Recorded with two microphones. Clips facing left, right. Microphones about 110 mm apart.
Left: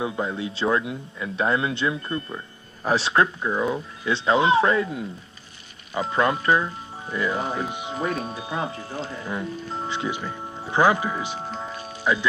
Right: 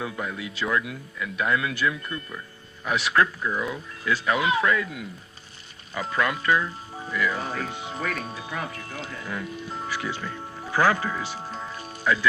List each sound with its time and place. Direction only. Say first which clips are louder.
0.0 s chime: left 5 dB; 25° left (ahead or behind)